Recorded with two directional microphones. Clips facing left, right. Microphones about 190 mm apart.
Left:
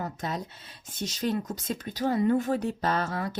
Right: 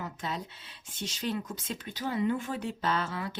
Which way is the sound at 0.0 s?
40° left (ahead or behind).